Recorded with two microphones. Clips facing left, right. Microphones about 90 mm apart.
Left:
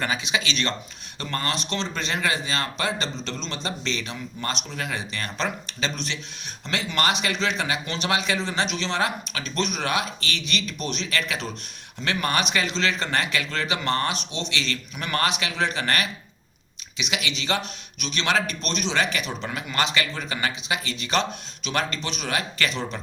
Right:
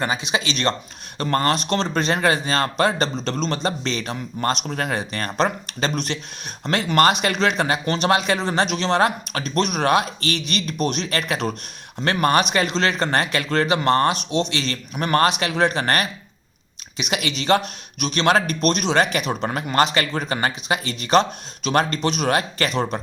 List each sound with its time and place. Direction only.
0.0 s speech: 35° right (ahead or behind)